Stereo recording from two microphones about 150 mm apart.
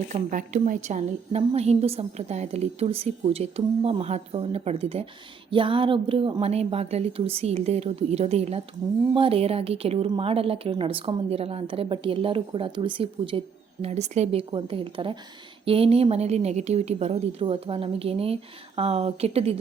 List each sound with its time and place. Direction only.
0.1 s a woman's voice: 55° right (ahead or behind); by 13.4 s 35° right (ahead or behind)
13.8 s a woman's voice: 50° right (ahead or behind)